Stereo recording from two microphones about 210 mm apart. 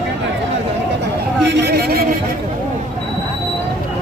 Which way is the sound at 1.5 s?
50° right (ahead or behind).